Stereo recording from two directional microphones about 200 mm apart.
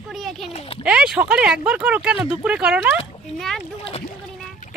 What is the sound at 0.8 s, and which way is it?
Speech, 5° right (ahead or behind).